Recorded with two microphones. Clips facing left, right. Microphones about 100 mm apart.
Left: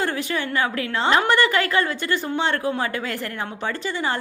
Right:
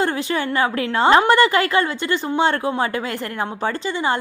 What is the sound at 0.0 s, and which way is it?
A woman's voice, 30° right (ahead or behind).